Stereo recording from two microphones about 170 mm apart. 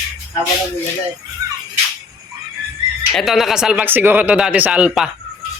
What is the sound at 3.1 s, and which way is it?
Speech, centre (ahead or behind).